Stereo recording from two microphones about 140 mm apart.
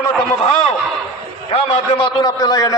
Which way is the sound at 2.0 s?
30° left (ahead or behind).